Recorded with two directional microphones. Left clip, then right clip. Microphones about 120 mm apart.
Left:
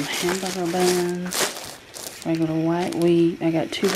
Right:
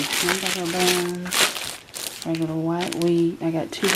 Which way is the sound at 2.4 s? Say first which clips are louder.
Left 3 dB; 20° left (ahead or behind).